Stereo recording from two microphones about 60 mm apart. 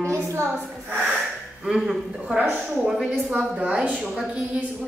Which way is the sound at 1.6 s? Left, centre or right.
Centre.